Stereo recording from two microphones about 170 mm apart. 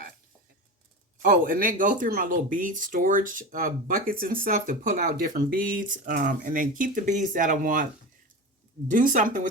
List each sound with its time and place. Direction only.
1.2 s speech: 60° right (ahead or behind)
8.9 s speech: 50° right (ahead or behind)